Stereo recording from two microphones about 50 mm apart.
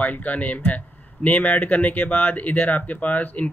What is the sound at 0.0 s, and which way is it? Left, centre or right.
Speech, left.